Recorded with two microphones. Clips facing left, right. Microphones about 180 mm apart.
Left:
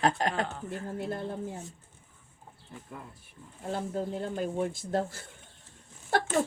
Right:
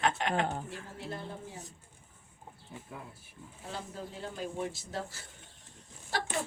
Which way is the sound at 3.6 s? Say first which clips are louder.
Left 9 dB; 50° left (ahead or behind).